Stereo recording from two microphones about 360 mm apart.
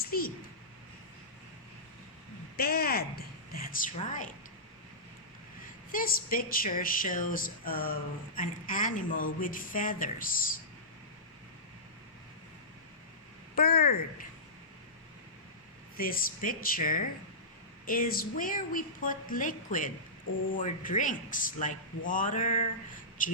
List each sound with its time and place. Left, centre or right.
0.1 s speech: left
2.6 s a woman's voice: left
5.9 s speech: left
13.6 s speech: left
16.0 s speech: left